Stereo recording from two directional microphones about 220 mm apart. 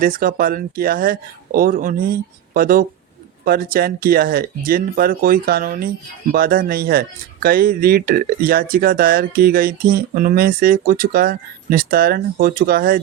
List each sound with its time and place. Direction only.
0.0 s speech: 40° right (ahead or behind)